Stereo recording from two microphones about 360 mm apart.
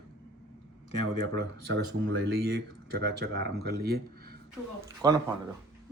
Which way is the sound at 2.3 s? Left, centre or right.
Right.